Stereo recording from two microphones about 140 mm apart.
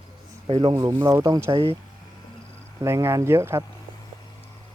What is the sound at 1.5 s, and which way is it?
Speech, 40° right (ahead or behind).